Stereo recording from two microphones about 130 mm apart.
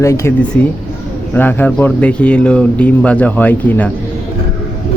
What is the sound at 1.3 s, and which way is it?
Speech, 15° left (ahead or behind).